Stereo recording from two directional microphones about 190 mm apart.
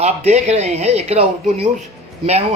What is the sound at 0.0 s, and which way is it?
Speech, 35° right (ahead or behind).